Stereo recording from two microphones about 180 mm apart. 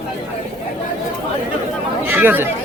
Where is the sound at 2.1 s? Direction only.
10° right (ahead or behind).